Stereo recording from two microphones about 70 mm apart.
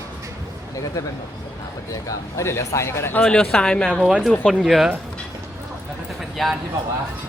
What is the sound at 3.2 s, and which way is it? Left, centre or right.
Speech, centre.